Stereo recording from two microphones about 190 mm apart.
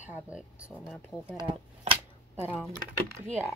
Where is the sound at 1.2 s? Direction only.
25° right (ahead or behind).